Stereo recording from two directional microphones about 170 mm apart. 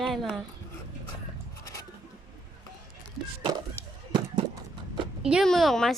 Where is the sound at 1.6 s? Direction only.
20° left (ahead or behind).